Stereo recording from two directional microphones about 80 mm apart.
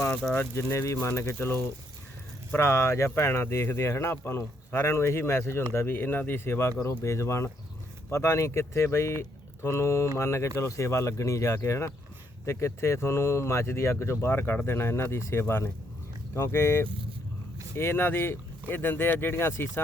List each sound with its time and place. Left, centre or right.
0.1 s speech: centre
0.5 s speech: left